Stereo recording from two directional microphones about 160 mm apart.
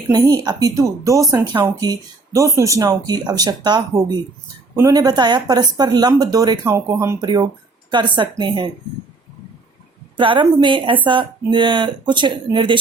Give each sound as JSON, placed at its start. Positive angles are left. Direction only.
{"t": 0.1, "sound": "speech", "side_deg": -25}
{"t": 7.2, "sound": "speech", "side_deg": -25}
{"t": 10.2, "sound": "speech", "side_deg": -30}